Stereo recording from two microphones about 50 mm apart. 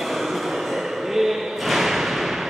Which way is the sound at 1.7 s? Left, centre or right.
Centre.